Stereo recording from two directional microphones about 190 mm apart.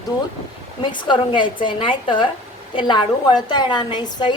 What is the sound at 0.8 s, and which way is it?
A woman's voice, 25° left (ahead or behind).